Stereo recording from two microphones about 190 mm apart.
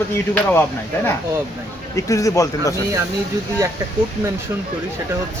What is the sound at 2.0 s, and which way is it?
Speech, 15° left (ahead or behind).